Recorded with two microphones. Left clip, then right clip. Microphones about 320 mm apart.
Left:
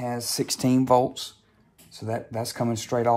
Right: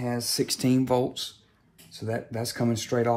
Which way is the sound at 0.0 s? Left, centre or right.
Centre.